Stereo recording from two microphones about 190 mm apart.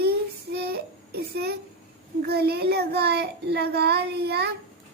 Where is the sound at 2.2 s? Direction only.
55° right (ahead or behind).